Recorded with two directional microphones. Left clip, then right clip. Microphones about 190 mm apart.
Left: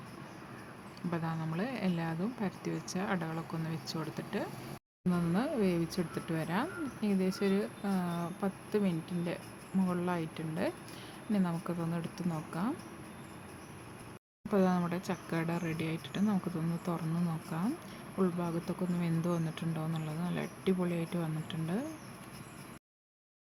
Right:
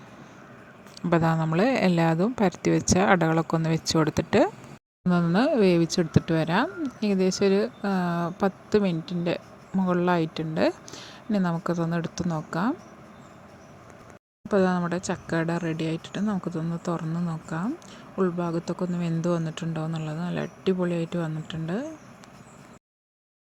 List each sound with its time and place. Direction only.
1.1 s speech: 45° right (ahead or behind)
5.1 s speech: 35° right (ahead or behind)
14.5 s speech: 30° right (ahead or behind)